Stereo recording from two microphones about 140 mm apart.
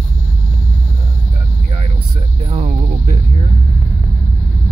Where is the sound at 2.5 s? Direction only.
55° right (ahead or behind).